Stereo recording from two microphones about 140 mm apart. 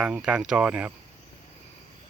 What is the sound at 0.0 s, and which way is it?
Speech, 5° right (ahead or behind).